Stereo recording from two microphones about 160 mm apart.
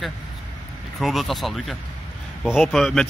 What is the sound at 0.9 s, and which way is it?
Speech, centre (ahead or behind).